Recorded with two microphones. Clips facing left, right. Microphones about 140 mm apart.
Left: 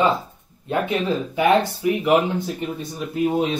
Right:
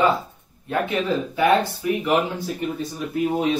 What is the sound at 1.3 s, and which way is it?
Speech, 15° left (ahead or behind).